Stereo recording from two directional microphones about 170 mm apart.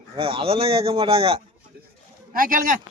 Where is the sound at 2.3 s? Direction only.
55° right (ahead or behind).